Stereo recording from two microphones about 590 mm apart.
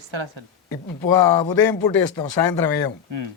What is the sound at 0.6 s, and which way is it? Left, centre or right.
A man's voice, left.